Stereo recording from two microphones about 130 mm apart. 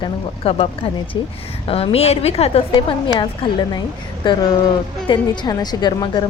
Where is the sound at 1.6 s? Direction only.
45° left (ahead or behind).